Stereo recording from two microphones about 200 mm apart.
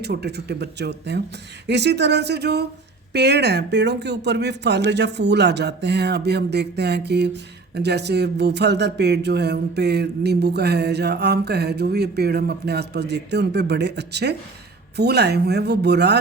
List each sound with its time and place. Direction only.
0.0 s speech: 55° right (ahead or behind)